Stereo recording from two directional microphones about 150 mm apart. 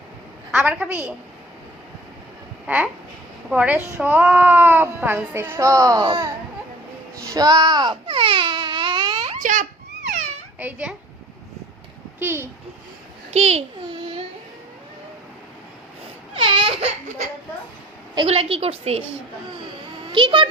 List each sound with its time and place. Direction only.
0.5 s a child's voice: 10° right (ahead or behind)
2.6 s a child's voice: 10° right (ahead or behind); by 6.2 s 25° right (ahead or behind)
7.3 s speech: 25° right (ahead or behind)
8.0 s wail: 35° right (ahead or behind)
9.4 s a sound: 60° right (ahead or behind)
10.6 s a child's voice: 10° right (ahead or behind)
12.2 s a child's voice: 15° right (ahead or behind)
13.3 s a child's voice: 45° right (ahead or behind)
16.3 s speech: 35° right (ahead or behind)
18.3 s a woman's voice: 40° right (ahead or behind)
20.1 s a woman's voice: 35° right (ahead or behind)